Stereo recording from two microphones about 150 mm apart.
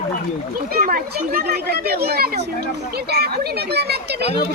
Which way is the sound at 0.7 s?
75° right (ahead or behind).